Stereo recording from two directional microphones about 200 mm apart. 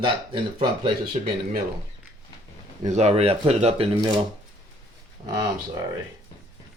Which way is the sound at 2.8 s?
35° right (ahead or behind).